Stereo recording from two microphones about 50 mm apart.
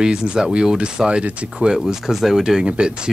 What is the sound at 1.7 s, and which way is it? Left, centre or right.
Speech, centre.